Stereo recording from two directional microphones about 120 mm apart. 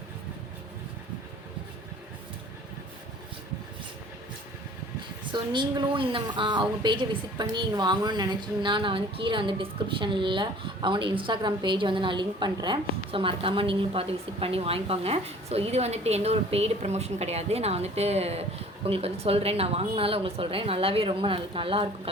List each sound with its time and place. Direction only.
5.3 s a woman's voice: 40° right (ahead or behind)